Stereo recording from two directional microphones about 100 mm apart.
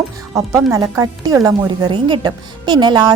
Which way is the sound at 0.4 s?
35° right (ahead or behind).